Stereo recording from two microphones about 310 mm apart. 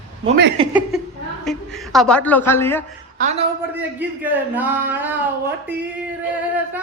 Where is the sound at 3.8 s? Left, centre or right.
Centre.